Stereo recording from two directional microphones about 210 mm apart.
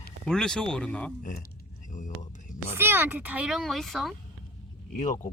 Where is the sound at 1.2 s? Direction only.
45° left (ahead or behind).